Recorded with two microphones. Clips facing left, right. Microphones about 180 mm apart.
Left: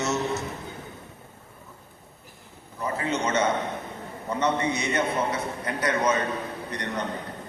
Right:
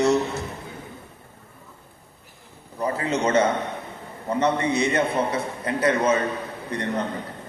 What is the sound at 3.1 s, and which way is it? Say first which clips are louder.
A man's voice: right 4 dB; 35° right (ahead or behind).